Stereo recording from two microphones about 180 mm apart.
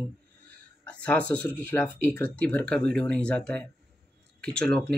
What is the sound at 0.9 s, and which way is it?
Speech, 5° left (ahead or behind).